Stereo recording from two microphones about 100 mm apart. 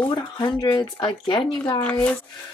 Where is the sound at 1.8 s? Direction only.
15° left (ahead or behind).